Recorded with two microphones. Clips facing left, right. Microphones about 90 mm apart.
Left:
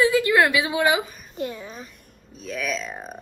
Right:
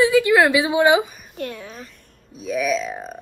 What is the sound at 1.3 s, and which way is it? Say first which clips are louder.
Speech: even; centre (ahead or behind).